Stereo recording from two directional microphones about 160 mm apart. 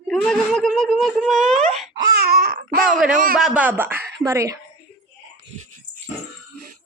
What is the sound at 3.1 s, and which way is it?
Speech, 55° right (ahead or behind).